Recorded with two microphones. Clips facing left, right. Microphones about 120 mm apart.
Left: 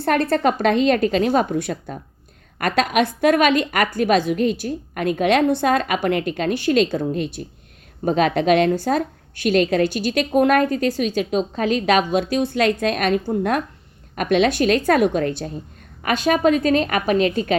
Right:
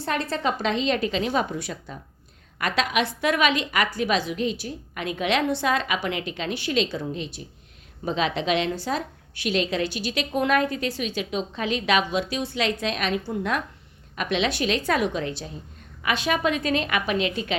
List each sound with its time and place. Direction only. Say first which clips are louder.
0.0 s a woman's voice: left 8 dB; 60° left (ahead or behind)